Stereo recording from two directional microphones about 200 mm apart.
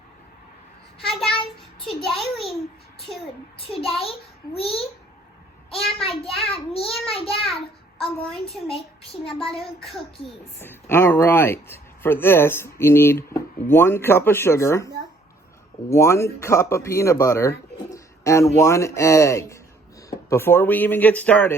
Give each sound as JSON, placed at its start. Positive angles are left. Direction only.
{"t": 1.0, "sound": "a child's voice", "side_deg": 0}
{"t": 3.6, "sound": "a child's voice", "side_deg": 30}
{"t": 8.4, "sound": "a child's voice", "side_deg": 30}
{"t": 10.6, "sound": "speech", "side_deg": 10}
{"t": 15.9, "sound": "speech", "side_deg": 15}